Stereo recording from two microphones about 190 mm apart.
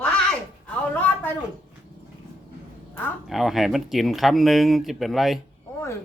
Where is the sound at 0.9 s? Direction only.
10° left (ahead or behind).